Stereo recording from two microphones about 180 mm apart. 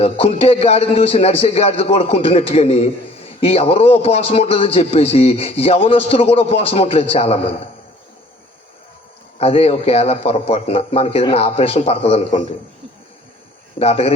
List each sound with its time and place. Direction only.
0.0 s a man's voice: 35° left (ahead or behind)
9.4 s a man's voice: 35° left (ahead or behind)
13.7 s a man's voice: 35° left (ahead or behind)